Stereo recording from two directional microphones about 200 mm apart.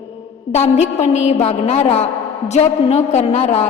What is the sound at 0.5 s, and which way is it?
A woman's voice, 35° left (ahead or behind).